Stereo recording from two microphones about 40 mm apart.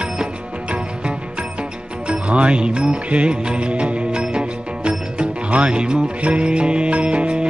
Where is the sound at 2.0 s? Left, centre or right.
Right.